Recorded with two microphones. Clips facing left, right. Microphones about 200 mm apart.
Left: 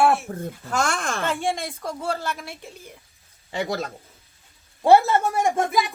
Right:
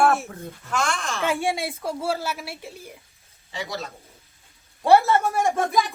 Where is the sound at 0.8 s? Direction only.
50° left (ahead or behind).